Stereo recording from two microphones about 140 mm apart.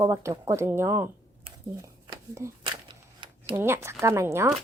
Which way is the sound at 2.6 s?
35° right (ahead or behind).